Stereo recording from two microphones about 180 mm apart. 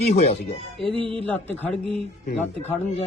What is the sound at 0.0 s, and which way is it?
Speech, 35° left (ahead or behind).